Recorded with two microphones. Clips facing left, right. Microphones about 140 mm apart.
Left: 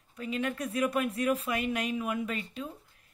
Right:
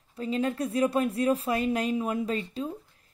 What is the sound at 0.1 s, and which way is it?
A woman's voice, 30° right (ahead or behind).